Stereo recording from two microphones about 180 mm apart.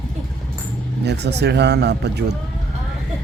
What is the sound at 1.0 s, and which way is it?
Speech, 70° right (ahead or behind).